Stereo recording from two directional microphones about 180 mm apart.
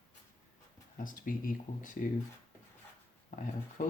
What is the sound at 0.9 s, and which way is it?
Speech, 50° left (ahead or behind).